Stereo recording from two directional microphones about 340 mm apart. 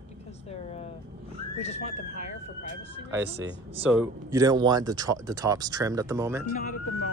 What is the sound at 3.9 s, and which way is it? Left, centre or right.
Speech, centre.